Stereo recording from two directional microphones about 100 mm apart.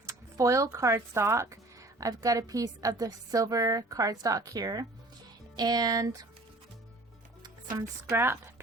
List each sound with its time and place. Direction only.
0.0 s a sound: 30° right (ahead or behind)
0.8 s a woman's voice: 30° right (ahead or behind)
8.1 s speech: 25° right (ahead or behind)